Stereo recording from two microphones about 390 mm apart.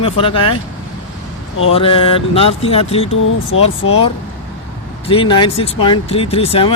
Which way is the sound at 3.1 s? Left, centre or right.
Left.